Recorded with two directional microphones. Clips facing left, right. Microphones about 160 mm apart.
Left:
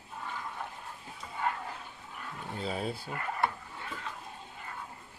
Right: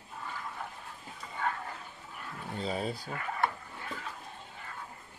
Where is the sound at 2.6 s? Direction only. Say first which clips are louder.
Right 1 dB; 5° left (ahead or behind).